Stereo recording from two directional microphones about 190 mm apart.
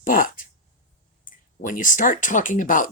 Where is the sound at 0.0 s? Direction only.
45° left (ahead or behind).